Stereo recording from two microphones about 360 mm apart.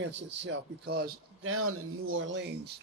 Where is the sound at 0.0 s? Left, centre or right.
Right.